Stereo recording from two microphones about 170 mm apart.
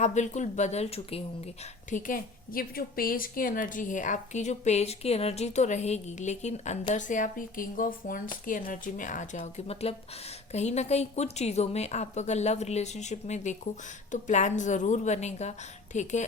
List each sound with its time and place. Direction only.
0.0 s a woman's voice: 45° left (ahead or behind)
1.9 s a woman's voice: 50° left (ahead or behind)